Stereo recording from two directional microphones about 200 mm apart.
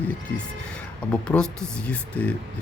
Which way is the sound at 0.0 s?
5° left (ahead or behind).